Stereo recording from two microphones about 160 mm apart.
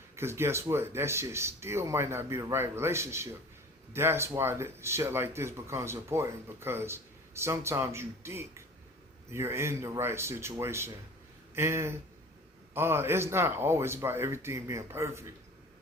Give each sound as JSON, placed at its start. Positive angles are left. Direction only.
{"t": 0.2, "sound": "speech", "side_deg": -15}